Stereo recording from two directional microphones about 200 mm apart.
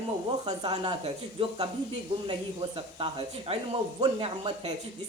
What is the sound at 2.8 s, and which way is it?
Speech, 25° right (ahead or behind).